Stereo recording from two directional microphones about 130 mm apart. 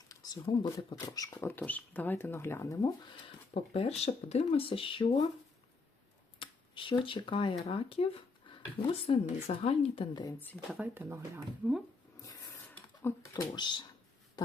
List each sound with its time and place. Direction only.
0.1 s a sound: 30° left (ahead or behind)
0.4 s speech: 35° left (ahead or behind)
1.4 s speech: 15° left (ahead or behind)
3.2 s speech: 50° left (ahead or behind)
6.4 s a sound: 40° left (ahead or behind)
7.0 s speech: 40° left (ahead or behind)
10.8 s speech: 15° right (ahead or behind)
12.2 s a sound: 25° left (ahead or behind)
13.0 s speech: 15° left (ahead or behind)
13.3 s speech: 30° left (ahead or behind)